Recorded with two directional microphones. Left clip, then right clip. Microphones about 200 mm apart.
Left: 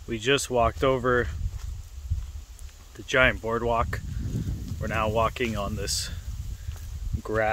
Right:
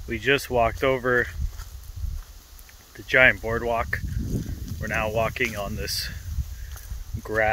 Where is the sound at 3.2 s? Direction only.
20° left (ahead or behind).